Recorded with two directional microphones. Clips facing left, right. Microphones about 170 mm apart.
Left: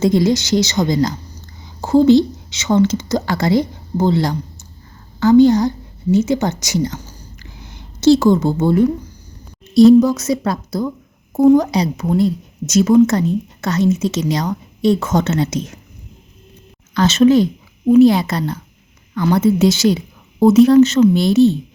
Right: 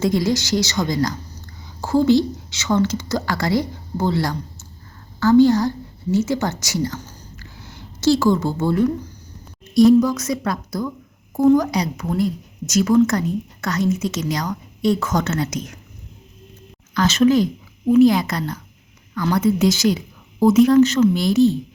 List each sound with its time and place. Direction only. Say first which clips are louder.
0.0 s a woman's voice: left 5 dB; 20° left (ahead or behind)
7.0 s a sound: left 1 dB; 10° left (ahead or behind)
9.7 s a woman's voice: left 4 dB; 25° left (ahead or behind)
16.9 s a woman's voice: left 4 dB; 25° left (ahead or behind)